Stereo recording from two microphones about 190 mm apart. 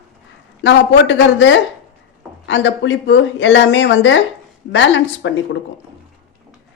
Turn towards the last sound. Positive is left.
turn(degrees=75)  # may be behind; listen again after turning